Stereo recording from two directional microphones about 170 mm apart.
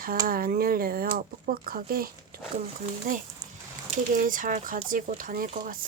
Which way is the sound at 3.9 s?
55° right (ahead or behind).